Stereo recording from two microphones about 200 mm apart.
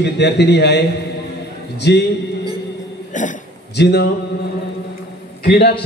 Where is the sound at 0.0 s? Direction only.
55° left (ahead or behind).